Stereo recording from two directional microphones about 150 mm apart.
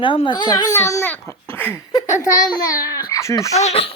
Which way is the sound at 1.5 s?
15° left (ahead or behind).